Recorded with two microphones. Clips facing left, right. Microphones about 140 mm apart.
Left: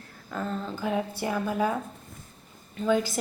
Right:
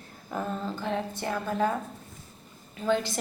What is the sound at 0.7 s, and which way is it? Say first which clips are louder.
A woman's voice: left 2 dB; 10° left (ahead or behind).